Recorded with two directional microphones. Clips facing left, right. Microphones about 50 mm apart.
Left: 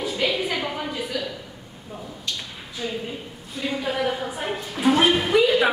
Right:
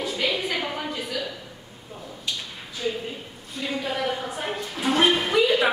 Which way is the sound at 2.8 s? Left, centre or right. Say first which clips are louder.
Right 2 dB; centre.